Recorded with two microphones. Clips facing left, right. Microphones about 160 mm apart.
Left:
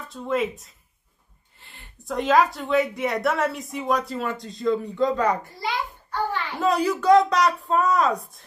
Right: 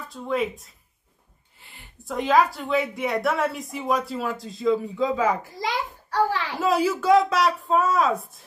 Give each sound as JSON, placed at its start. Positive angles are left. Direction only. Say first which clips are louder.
{"t": 0.1, "sound": "a woman's voice", "louder": "left 1 dB", "side_deg": 0}
{"t": 1.6, "sound": "a sound", "louder": "even", "side_deg": 0}
{"t": 2.0, "sound": "a woman's voice", "louder": "left 1 dB", "side_deg": 0}
{"t": 5.6, "sound": "a child's voice", "louder": "right 1 dB", "side_deg": -90}
{"t": 6.6, "sound": "a woman's voice", "louder": "left 1 dB", "side_deg": -5}